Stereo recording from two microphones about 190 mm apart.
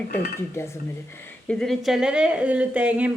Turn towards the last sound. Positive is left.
turn(degrees=-5)  # may be behind; listen again after turning